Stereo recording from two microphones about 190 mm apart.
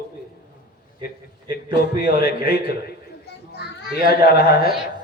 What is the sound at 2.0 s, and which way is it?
Speech, 55° left (ahead or behind).